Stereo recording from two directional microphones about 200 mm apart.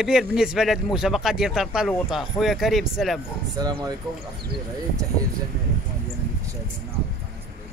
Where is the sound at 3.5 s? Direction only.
20° right (ahead or behind).